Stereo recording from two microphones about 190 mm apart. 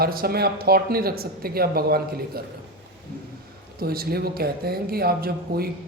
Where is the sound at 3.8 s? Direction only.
55° right (ahead or behind).